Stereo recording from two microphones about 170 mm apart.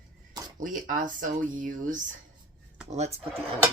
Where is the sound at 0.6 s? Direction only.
50° right (ahead or behind).